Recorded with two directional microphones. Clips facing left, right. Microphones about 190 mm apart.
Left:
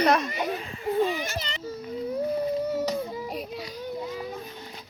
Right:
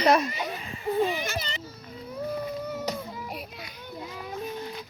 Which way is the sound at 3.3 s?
35° left (ahead or behind).